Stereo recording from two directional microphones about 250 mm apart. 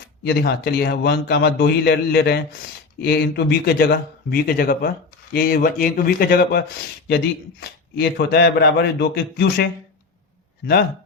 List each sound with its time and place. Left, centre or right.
0.2 s a man's voice: left
7.9 s a man's voice: left